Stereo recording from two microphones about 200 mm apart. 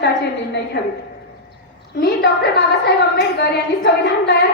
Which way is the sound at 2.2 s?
55° left (ahead or behind).